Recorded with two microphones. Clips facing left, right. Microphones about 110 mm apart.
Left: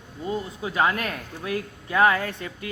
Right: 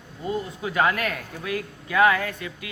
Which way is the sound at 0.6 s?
25° left (ahead or behind).